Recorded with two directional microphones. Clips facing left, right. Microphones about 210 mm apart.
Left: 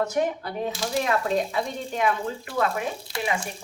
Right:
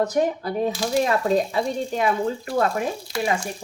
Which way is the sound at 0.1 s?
35° right (ahead or behind).